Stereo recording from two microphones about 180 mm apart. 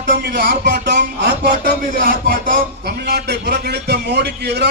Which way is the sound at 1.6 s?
50° right (ahead or behind).